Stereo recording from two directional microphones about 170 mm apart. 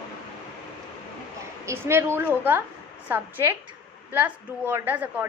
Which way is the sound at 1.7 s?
15° right (ahead or behind).